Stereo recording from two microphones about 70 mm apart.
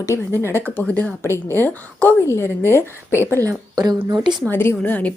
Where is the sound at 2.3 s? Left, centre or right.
Left.